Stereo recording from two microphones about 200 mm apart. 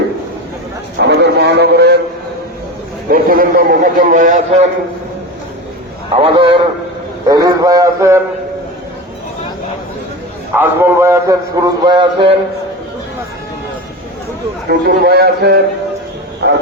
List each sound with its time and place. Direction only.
0.9 s a sound: 60° right (ahead or behind)
3.1 s a man's voice: 45° right (ahead or behind)
6.1 s a man's voice: 25° right (ahead or behind)
7.3 s a sound: 20° right (ahead or behind)
10.5 s a man's voice: 10° right (ahead or behind)
14.7 s a man's voice: 50° right (ahead or behind)